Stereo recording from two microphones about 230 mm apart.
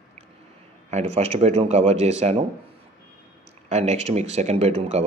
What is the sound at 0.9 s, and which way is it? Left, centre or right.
Speech, right.